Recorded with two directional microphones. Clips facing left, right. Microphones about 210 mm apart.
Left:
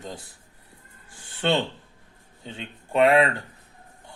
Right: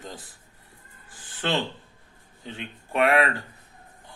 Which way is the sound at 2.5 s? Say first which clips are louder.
Left 1 dB; 25° left (ahead or behind).